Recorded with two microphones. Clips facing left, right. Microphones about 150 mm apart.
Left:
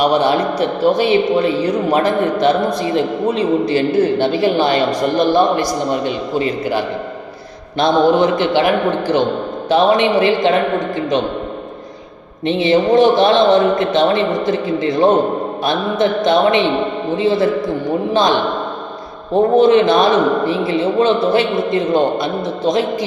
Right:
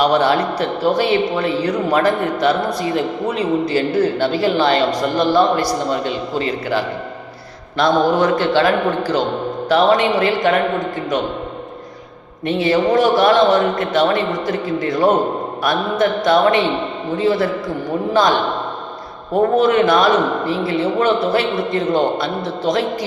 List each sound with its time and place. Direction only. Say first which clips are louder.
0.0 s speech: left 1 dB; 15° left (ahead or behind)
12.5 s speech: left 2 dB; 20° left (ahead or behind)